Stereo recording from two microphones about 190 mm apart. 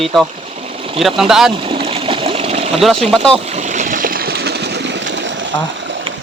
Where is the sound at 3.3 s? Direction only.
35° right (ahead or behind); by 5.4 s 75° right (ahead or behind).